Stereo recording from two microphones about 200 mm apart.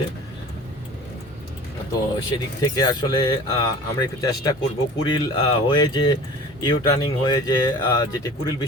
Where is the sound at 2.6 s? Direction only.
20° left (ahead or behind).